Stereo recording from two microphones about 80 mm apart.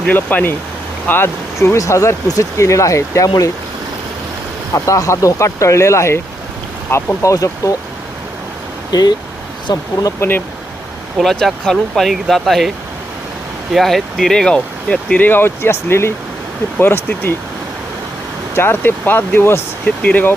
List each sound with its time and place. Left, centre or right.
0.1 s speech: left
1.5 s speech: left
4.7 s speech: left
8.9 s speech: left
10.2 s speech: left
11.2 s speech: centre
13.7 s speech: centre; by 17.3 s left
18.5 s speech: left
20.0 s speech: centre